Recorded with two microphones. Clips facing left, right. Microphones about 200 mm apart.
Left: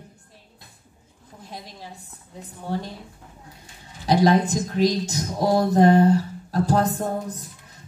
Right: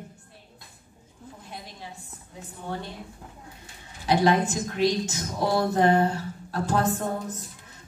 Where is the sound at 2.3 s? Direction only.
35° left (ahead or behind).